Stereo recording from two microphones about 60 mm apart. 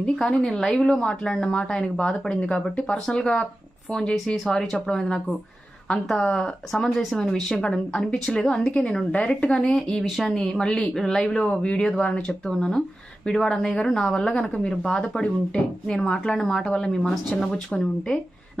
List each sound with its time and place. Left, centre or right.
0.0 s a woman's voice: centre
4.5 s a woman's voice: centre
7.5 s a woman's voice: centre
9.6 s a woman's voice: centre
17.7 s a woman's voice: centre